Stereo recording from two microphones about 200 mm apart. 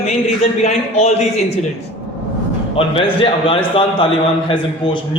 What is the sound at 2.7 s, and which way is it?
A man's voice, 25° left (ahead or behind).